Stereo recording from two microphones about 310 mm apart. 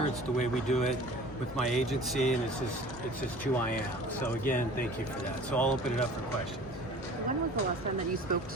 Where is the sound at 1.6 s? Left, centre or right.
Centre.